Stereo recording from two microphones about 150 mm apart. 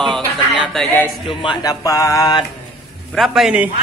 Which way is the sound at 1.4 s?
25° left (ahead or behind).